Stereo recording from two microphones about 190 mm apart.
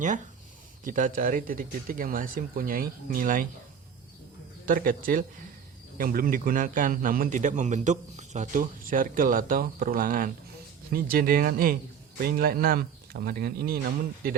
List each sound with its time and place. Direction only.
0.9 s a man's voice: 45° right (ahead or behind)
4.6 s a man's voice: 45° right (ahead or behind)